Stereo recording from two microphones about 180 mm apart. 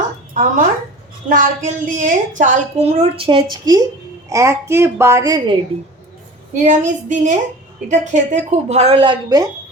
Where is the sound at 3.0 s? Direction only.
30° right (ahead or behind).